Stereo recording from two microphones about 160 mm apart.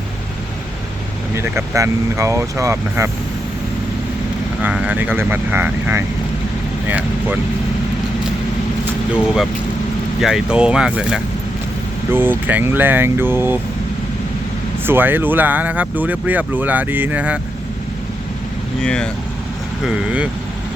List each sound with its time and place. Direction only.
1.4 s speech: 20° right (ahead or behind)
4.6 s speech: 10° right (ahead or behind)
9.1 s speech: 5° right (ahead or behind)
14.8 s speech: 15° right (ahead or behind)
18.8 s speech: 5° left (ahead or behind)
19.8 s speech: 5° right (ahead or behind)